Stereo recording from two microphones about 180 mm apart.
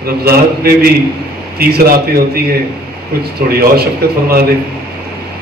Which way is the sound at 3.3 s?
60° right (ahead or behind).